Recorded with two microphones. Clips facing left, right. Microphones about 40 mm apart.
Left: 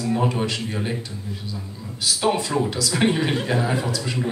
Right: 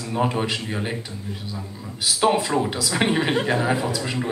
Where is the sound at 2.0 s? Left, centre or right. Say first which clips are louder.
Right 2 dB; centre.